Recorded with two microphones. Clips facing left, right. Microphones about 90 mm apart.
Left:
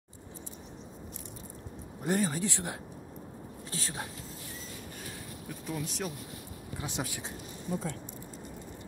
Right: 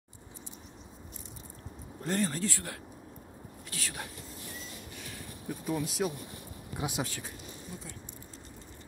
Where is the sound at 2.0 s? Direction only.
10° left (ahead or behind); by 4.1 s 30° left (ahead or behind).